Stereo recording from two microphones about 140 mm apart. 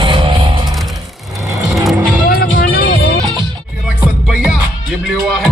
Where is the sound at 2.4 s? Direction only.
90° left.